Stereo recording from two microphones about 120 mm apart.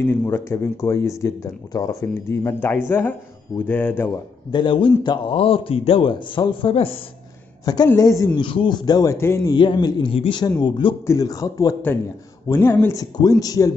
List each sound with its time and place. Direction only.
0.0 s speech: 20° left (ahead or behind)
4.5 s a man's voice: 40° left (ahead or behind)
7.6 s speech: 35° left (ahead or behind)
8.4 s speech: 45° left (ahead or behind); by 9.5 s 20° left (ahead or behind)
9.5 s speech: 40° left (ahead or behind)
10.1 s a man's voice: 50° left (ahead or behind)
11.1 s speech: 30° left (ahead or behind)